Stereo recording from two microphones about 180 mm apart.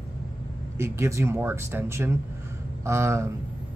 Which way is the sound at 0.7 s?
15° right (ahead or behind).